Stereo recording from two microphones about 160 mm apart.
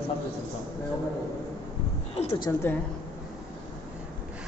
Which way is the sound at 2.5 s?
20° left (ahead or behind).